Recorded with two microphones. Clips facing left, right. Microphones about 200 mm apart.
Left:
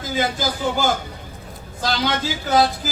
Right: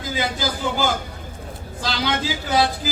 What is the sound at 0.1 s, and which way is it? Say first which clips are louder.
Speech: left 2 dB; 50° left (ahead or behind).